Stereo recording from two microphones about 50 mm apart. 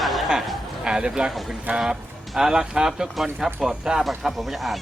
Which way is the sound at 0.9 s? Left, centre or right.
Centre.